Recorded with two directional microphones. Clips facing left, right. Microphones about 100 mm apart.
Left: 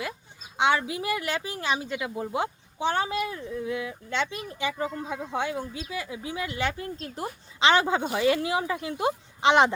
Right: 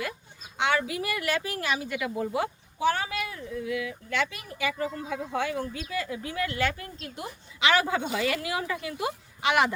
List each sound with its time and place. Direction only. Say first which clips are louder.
0.5 s a woman's voice: left 2 dB; 20° left (ahead or behind)